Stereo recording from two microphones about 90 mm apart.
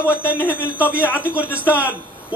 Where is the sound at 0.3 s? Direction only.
20° right (ahead or behind).